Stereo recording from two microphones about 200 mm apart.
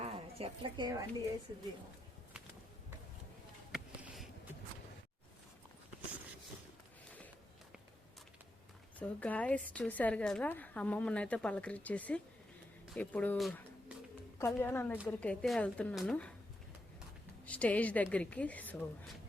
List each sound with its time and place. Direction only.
0.0 s speech: 30° right (ahead or behind)
3.7 s a sound: centre (ahead or behind)
9.0 s a woman's voice: 5° left (ahead or behind)
14.3 s a woman's voice: 10° left (ahead or behind)
17.4 s a woman's voice: 5° left (ahead or behind)